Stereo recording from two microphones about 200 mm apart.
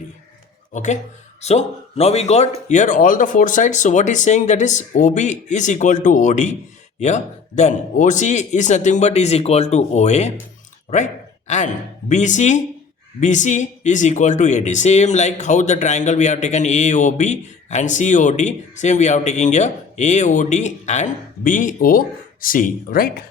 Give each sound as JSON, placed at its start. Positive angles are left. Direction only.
{"t": 0.7, "sound": "speech", "side_deg": 35}